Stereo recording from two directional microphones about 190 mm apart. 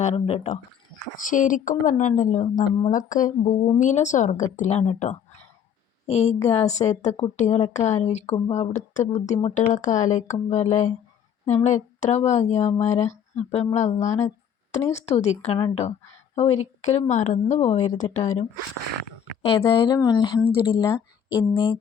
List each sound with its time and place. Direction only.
0.0 s a woman's voice: 35° left (ahead or behind)
1.1 s a woman's voice: 45° left (ahead or behind)
19.6 s a woman's voice: 20° left (ahead or behind)